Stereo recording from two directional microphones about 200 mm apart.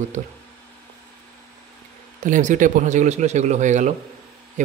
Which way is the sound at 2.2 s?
40° right (ahead or behind).